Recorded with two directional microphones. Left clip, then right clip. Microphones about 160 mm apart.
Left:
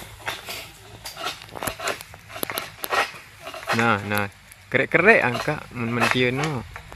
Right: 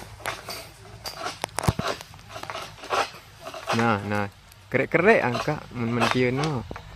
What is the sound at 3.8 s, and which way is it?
Speech, centre (ahead or behind).